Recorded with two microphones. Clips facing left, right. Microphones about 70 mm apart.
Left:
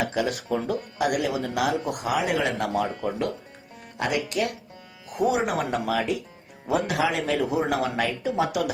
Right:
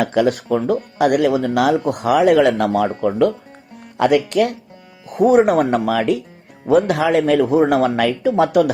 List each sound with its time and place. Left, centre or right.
0.0 s speech: right